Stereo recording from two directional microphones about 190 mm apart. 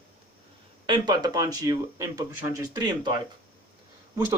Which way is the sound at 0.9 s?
20° right (ahead or behind).